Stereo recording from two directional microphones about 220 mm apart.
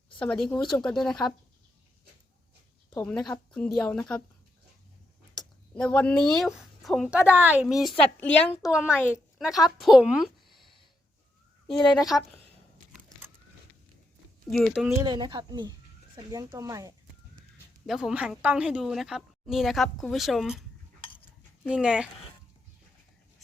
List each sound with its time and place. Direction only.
0.2 s a woman's voice: 5° left (ahead or behind)
2.9 s a woman's voice: 5° left (ahead or behind)
5.4 s a woman's voice: 5° left (ahead or behind)
9.0 s speech: 10° left (ahead or behind)
9.4 s a woman's voice: centre (ahead or behind)
11.7 s speech: 15° left (ahead or behind)
14.5 s a woman's voice: centre (ahead or behind)
15.0 s speech: 20° right (ahead or behind)
17.8 s a woman's voice: centre (ahead or behind)